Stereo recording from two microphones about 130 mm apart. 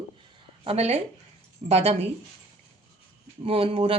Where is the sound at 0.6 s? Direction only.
50° right (ahead or behind).